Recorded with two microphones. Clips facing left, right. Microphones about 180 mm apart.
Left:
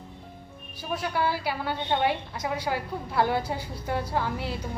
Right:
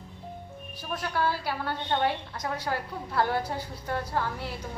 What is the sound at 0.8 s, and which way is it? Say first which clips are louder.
A woman's voice: left 2 dB; 10° left (ahead or behind).